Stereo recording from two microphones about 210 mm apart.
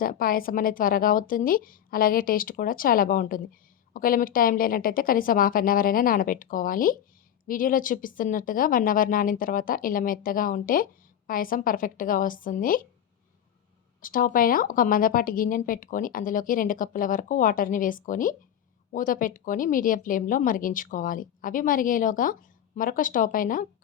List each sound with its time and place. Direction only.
0.0 s a woman's voice: 45° left (ahead or behind)
14.0 s speech: 40° left (ahead or behind)